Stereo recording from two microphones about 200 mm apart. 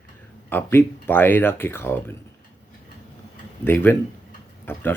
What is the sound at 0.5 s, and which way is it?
Speech, 10° left (ahead or behind).